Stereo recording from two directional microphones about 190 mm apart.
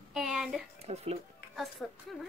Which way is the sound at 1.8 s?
5° left (ahead or behind).